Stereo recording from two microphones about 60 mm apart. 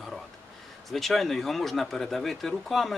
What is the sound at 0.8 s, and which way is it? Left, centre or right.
Speech, centre.